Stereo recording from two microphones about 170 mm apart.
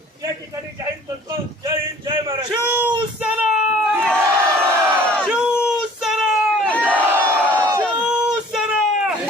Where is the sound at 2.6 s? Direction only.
10° right (ahead or behind).